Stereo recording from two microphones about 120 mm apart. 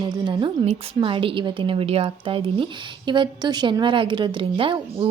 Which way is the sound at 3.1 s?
40° right (ahead or behind).